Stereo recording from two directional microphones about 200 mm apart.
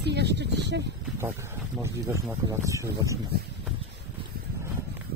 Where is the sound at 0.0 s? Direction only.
55° right (ahead or behind).